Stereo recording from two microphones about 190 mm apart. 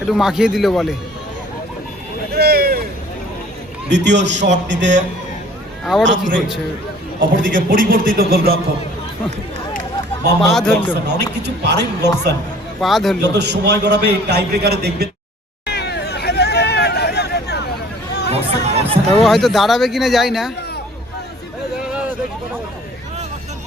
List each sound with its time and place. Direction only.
0.1 s speech: centre (ahead or behind)
2.3 s a sound: 55° right (ahead or behind)
3.8 s a man's voice: 65° right (ahead or behind)
5.9 s speech: 5° right (ahead or behind)
7.2 s a man's voice: 45° right (ahead or behind)
10.4 s speech: centre (ahead or behind)
11.0 s a man's voice: 65° right (ahead or behind)
12.8 s speech: centre (ahead or behind)
13.2 s a man's voice: 65° right (ahead or behind)
15.6 s hubbub: 60° left (ahead or behind)
18.3 s chatter: 30° right (ahead or behind)
19.1 s speech: centre (ahead or behind)